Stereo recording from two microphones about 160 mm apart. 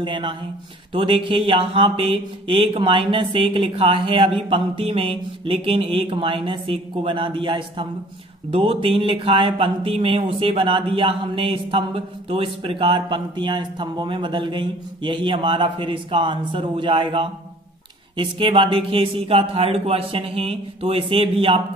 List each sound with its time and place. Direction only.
0.0 s speech: 30° right (ahead or behind)